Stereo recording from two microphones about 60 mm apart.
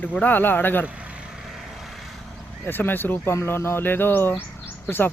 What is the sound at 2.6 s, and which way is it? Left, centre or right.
Speech, left.